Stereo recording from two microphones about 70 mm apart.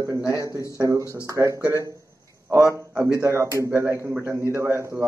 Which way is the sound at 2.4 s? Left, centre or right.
Right.